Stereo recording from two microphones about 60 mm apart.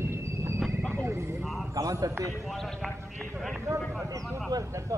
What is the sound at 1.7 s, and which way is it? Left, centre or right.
Speech, right.